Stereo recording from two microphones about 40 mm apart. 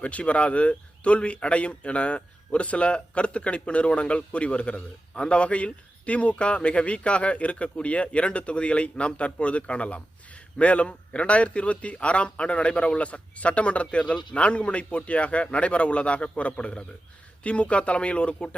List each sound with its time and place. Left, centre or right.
0.0 s speech: left